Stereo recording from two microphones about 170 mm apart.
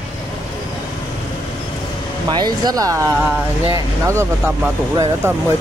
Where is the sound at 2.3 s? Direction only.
25° right (ahead or behind).